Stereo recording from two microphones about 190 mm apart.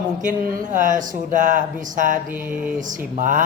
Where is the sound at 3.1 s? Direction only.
45° right (ahead or behind).